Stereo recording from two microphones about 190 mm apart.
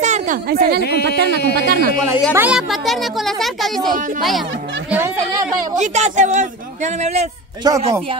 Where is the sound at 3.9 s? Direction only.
45° right (ahead or behind).